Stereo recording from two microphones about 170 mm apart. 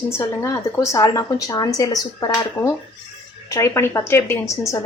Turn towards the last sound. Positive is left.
turn(degrees=15)  # may be behind; listen again after turning